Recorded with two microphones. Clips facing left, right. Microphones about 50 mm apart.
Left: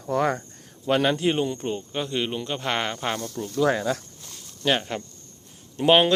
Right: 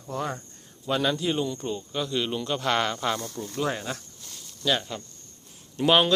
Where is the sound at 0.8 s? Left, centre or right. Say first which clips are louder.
Left 4 dB; left.